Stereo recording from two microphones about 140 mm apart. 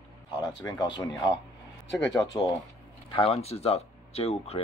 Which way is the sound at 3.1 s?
45° left (ahead or behind).